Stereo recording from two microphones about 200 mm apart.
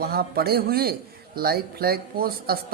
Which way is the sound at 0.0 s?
50° right (ahead or behind).